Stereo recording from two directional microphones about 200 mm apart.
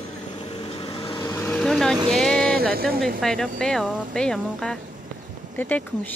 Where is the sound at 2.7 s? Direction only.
50° right (ahead or behind).